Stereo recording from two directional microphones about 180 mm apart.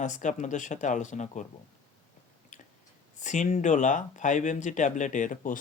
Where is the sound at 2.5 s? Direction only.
40° left (ahead or behind).